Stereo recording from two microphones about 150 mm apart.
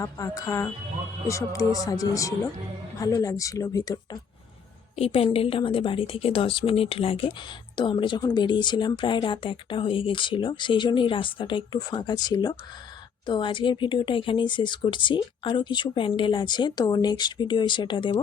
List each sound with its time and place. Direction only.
0.0 s speech: 20° left (ahead or behind)
4.9 s speech: 40° left (ahead or behind)